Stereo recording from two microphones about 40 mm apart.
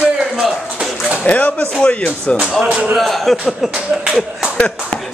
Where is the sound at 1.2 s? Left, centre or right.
Left.